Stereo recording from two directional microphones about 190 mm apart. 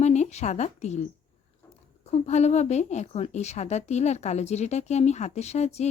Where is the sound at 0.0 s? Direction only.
35° left (ahead or behind).